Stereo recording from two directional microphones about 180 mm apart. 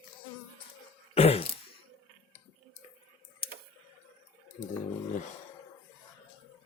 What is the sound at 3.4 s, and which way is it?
Tick, 30° left (ahead or behind).